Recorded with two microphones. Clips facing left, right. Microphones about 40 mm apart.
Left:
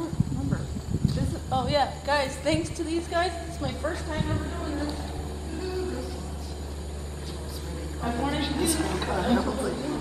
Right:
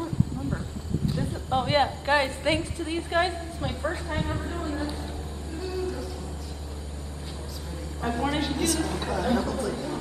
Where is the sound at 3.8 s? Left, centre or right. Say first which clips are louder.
Right 1 dB; centre.